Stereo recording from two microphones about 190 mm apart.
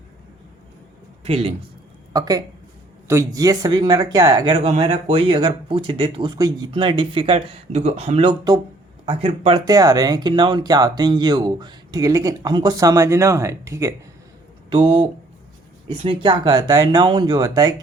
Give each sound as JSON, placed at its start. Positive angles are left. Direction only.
{"t": 1.2, "sound": "a man's voice", "side_deg": -30}
{"t": 2.1, "sound": "speech", "side_deg": -20}
{"t": 14.7, "sound": "speech", "side_deg": -25}